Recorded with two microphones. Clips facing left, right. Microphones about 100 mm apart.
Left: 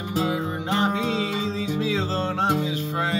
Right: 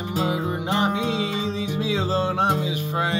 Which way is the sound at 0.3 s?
15° right (ahead or behind).